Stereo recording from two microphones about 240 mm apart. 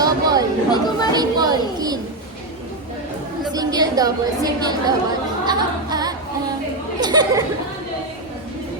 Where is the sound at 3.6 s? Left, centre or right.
Centre.